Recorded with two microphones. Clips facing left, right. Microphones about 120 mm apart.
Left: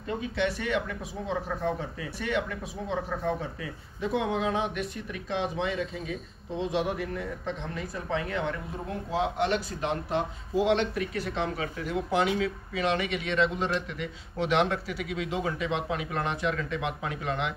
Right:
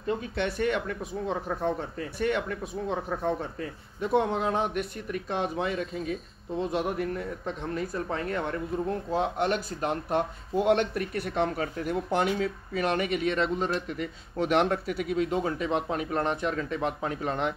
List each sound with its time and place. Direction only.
0.2 s speech: 50° right (ahead or behind)
4.0 s speech: 45° right (ahead or behind)